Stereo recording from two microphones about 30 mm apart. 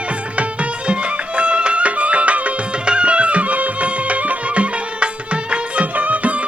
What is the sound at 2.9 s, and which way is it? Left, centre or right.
Music, right.